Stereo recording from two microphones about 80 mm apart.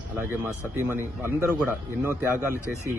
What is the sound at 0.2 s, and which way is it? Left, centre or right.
Speech, right.